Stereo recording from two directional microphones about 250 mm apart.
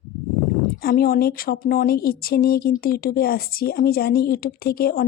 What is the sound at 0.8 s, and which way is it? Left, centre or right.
Speech, left.